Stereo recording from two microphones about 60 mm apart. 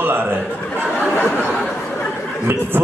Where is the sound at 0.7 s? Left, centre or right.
Left.